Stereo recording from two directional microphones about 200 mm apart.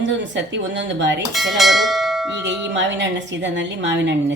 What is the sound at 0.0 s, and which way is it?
Speech, 65° right (ahead or behind).